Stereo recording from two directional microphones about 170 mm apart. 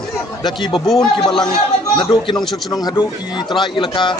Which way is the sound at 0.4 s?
25° left (ahead or behind).